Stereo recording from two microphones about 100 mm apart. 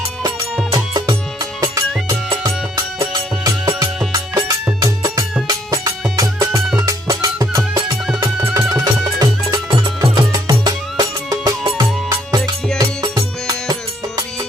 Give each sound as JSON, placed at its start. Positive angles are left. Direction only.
{"t": 0.2, "sound": "music", "side_deg": -35}